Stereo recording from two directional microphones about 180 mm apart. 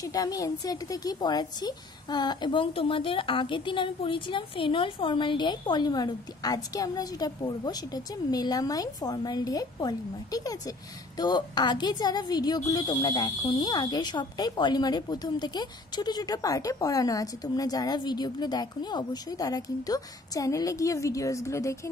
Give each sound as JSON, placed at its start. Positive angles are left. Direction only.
{"t": 0.0, "sound": "a woman's voice", "side_deg": 20}